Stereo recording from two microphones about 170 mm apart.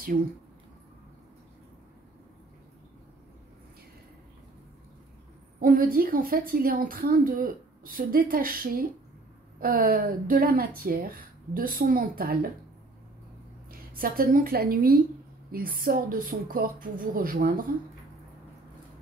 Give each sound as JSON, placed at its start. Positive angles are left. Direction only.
{"t": 5.6, "sound": "a woman's voice", "side_deg": -55}
{"t": 13.7, "sound": "a woman's voice", "side_deg": -60}